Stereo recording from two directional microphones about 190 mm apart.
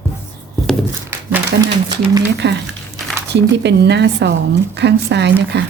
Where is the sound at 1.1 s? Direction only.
15° right (ahead or behind).